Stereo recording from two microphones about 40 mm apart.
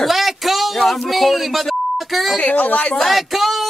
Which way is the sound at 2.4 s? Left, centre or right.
Left.